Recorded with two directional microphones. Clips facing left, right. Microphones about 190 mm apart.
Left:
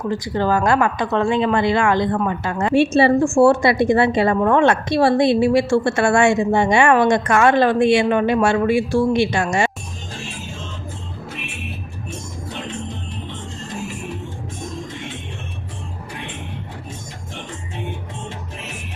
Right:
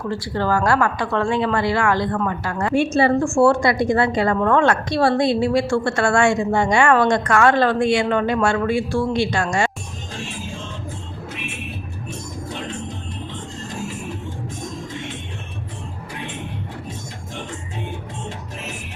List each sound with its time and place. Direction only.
0.0 s a woman's voice: 20° left (ahead or behind)